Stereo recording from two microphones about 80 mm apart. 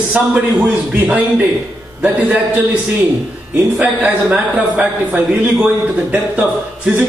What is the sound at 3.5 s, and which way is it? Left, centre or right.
A man's voice, centre.